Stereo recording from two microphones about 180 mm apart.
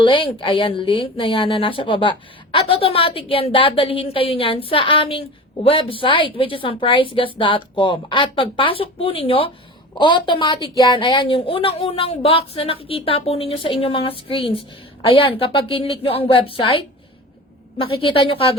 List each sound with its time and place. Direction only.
0.0 s a woman's voice: 30° left (ahead or behind)